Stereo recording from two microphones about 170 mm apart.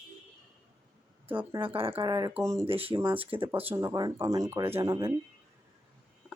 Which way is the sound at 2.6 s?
35° right (ahead or behind).